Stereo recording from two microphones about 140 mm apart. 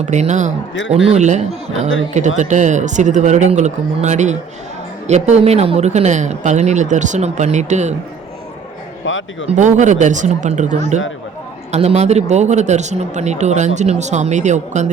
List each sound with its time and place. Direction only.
0.0 s speech: 55° right (ahead or behind)
0.9 s speech: 45° right (ahead or behind)
9.5 s speech: 60° right (ahead or behind)